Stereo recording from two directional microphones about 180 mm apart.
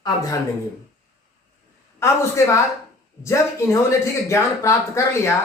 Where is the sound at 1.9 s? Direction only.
15° left (ahead or behind).